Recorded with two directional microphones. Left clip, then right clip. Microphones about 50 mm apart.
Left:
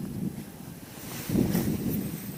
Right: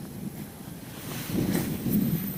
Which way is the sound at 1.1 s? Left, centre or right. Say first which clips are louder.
Left 1 dB; left.